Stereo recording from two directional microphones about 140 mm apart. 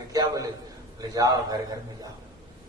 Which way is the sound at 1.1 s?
25° right (ahead or behind).